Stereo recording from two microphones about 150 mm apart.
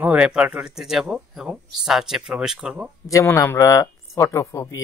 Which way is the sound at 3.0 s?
20° left (ahead or behind).